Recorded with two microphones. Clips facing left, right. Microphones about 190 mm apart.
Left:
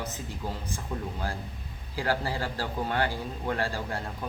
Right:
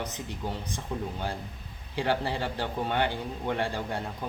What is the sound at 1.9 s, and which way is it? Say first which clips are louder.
A man's voice: right 1 dB; 20° right (ahead or behind).